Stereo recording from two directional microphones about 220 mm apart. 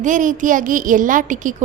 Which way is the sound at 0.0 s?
35° right (ahead or behind).